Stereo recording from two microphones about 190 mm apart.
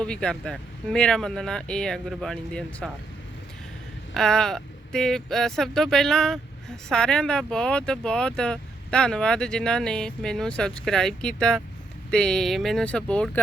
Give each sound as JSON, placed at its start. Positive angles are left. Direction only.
{"t": 0.0, "sound": "speech", "side_deg": 5}
{"t": 4.1, "sound": "speech", "side_deg": 5}